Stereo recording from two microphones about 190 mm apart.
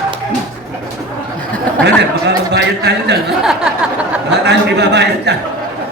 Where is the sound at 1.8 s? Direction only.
65° right (ahead or behind).